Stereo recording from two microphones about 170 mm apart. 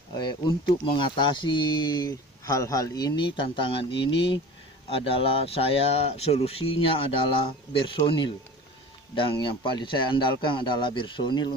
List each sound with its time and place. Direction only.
0.1 s speech: 25° left (ahead or behind)